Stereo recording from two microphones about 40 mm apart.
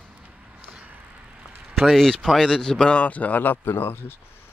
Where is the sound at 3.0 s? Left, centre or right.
Left.